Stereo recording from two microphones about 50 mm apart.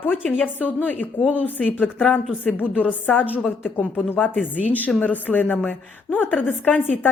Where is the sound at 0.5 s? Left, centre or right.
Left.